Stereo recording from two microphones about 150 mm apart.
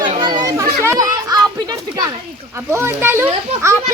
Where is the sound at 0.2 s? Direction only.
30° right (ahead or behind).